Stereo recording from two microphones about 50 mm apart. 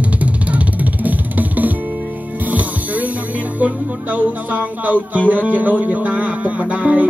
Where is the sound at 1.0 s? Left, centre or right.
Right.